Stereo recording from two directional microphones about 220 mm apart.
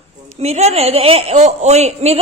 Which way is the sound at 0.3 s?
30° right (ahead or behind).